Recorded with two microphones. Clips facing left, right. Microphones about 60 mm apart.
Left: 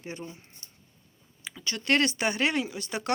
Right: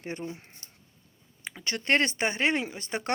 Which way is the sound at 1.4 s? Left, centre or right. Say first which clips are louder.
Right 2 dB; right.